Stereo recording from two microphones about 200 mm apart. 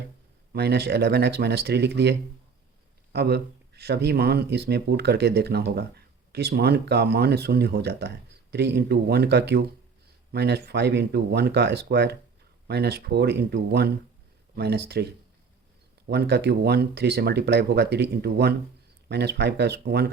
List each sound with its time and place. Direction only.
0.5 s speech: 55° right (ahead or behind)
16.0 s speech: 55° right (ahead or behind)